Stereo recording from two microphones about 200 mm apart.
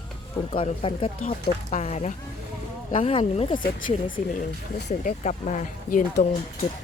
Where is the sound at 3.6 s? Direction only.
45° left (ahead or behind).